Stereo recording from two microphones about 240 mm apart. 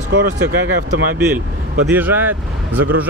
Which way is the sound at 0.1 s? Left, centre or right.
Right.